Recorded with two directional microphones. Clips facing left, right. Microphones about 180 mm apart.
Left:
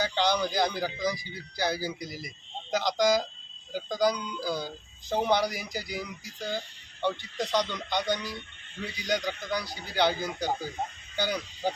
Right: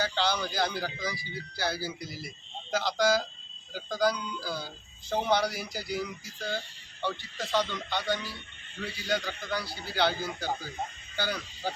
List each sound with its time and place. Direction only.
0.0 s speech: 15° left (ahead or behind)